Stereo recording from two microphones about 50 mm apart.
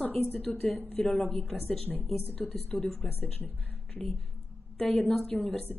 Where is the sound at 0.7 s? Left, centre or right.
Left.